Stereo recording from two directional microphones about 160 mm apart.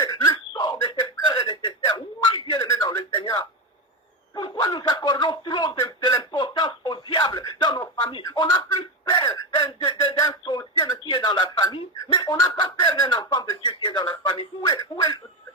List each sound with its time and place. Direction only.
0.0 s throat clearing: 25° left (ahead or behind)
2.5 s a sound: 20° left (ahead or behind)
11.0 s chicken: 30° left (ahead or behind)